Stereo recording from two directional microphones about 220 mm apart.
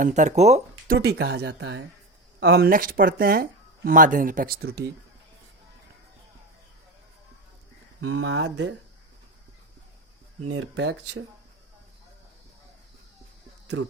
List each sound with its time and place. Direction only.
0.0 s speech: 35° right (ahead or behind)
0.9 s speech: 50° right (ahead or behind)
8.0 s speech: 60° right (ahead or behind)
10.4 s speech: 70° right (ahead or behind)